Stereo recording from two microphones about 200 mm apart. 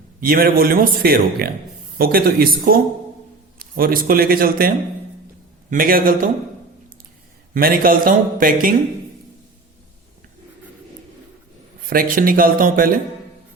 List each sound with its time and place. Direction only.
0.2 s a man's voice: 45° right (ahead or behind)
5.7 s a man's voice: 45° right (ahead or behind)
7.5 s a man's voice: 45° right (ahead or behind)
11.9 s a man's voice: 45° right (ahead or behind)